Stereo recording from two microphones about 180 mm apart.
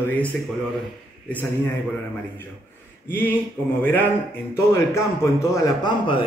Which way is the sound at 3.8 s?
10° left (ahead or behind).